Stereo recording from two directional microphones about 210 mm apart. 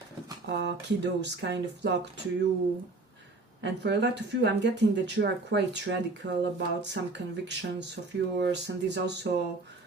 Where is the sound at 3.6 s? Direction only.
55° right (ahead or behind).